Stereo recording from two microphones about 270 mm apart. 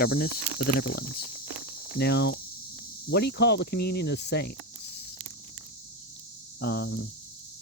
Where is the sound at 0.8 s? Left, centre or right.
Left.